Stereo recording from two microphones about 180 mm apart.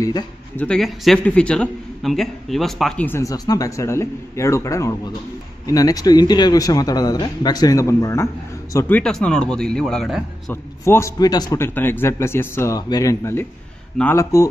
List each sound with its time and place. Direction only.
0.6 s a man's voice: 5° left (ahead or behind)
3.1 s a man's voice: 15° left (ahead or behind); by 10.2 s centre (ahead or behind)
10.5 s speech: 15° left (ahead or behind)